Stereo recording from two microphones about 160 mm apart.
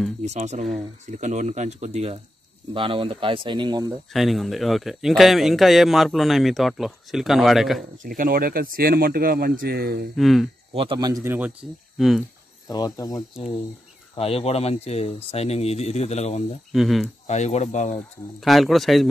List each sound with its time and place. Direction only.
0.2 s speech: 45° right (ahead or behind); by 3.9 s 25° right (ahead or behind)
4.1 s speech: centre (ahead or behind)
8.2 s speech: 65° right (ahead or behind)
10.1 s speech: centre (ahead or behind)
10.7 s a man's voice: 35° right (ahead or behind)
11.6 s speech: centre (ahead or behind)
12.6 s speech: 25° left (ahead or behind)
14.1 s speech: 40° left (ahead or behind)
16.7 s speech: centre (ahead or behind)
17.3 s speech: 50° left (ahead or behind)
18.4 s speech: centre (ahead or behind)